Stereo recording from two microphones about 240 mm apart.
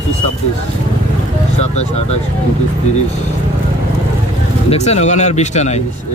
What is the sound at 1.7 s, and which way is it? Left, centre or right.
Speech, left.